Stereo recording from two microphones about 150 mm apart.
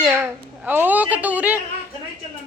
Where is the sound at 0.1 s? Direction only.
10° right (ahead or behind).